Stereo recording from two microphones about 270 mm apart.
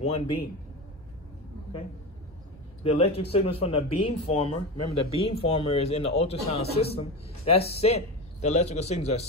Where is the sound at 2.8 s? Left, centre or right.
Left.